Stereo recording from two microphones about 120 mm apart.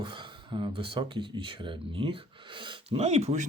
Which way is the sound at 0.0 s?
40° right (ahead or behind).